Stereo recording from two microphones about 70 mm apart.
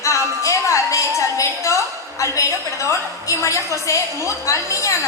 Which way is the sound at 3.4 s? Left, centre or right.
Left.